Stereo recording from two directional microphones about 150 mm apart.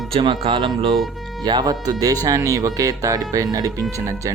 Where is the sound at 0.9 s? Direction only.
Centre (ahead or behind).